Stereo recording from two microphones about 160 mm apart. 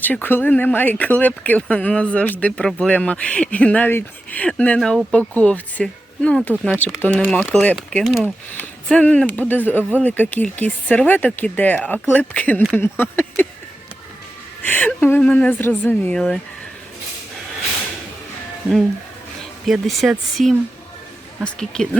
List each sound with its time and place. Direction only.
0.0 s speech: 10° left (ahead or behind)
7.3 s speech: centre (ahead or behind)
14.7 s speech: 10° left (ahead or behind)
19.6 s speech: centre (ahead or behind)